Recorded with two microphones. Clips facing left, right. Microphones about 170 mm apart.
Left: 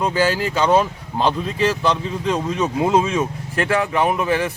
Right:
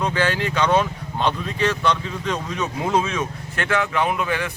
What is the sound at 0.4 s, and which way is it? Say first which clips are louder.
Speech: left 1 dB; 35° left (ahead or behind).